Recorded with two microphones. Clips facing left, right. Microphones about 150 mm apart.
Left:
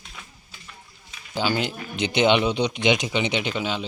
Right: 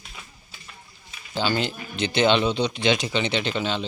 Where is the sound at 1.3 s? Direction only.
10° left (ahead or behind).